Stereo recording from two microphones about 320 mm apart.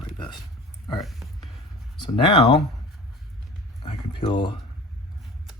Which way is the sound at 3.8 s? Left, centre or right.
Centre.